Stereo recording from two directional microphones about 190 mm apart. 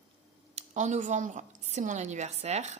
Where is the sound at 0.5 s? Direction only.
40° right (ahead or behind).